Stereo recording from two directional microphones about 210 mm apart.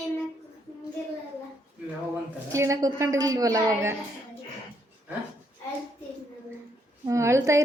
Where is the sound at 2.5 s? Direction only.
15° right (ahead or behind).